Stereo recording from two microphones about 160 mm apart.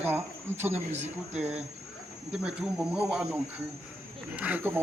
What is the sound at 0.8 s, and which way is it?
Speech, 45° right (ahead or behind).